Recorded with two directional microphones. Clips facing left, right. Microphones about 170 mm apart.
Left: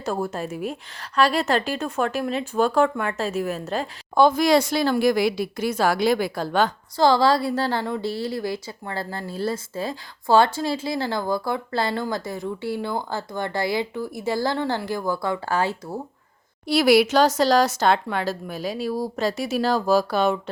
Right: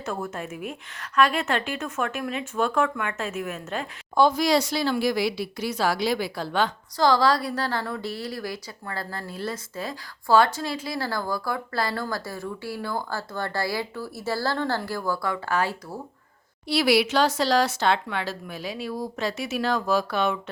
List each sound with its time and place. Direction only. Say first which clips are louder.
0.0 s speech: left 5 dB; 35° left (ahead or behind)
4.1 s speech: left 3 dB; 55° left (ahead or behind)
6.9 s a woman's voice: left 3 dB; 25° left (ahead or behind)
16.6 s speech: left 4 dB; 45° left (ahead or behind)